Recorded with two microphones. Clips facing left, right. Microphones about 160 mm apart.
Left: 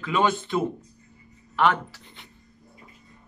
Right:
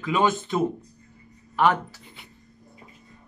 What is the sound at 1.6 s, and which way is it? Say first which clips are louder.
Speech: right 1 dB; 10° right (ahead or behind).